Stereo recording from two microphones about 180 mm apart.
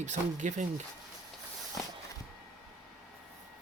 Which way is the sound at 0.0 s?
40° right (ahead or behind).